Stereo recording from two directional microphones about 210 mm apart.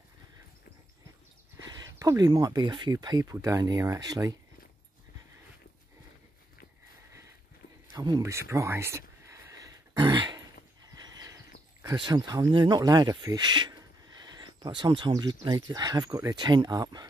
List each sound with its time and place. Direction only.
2.0 s speech: 15° right (ahead or behind)
7.9 s speech: 20° right (ahead or behind)
9.9 s a sound: 20° right (ahead or behind)
11.8 s speech: 20° right (ahead or behind)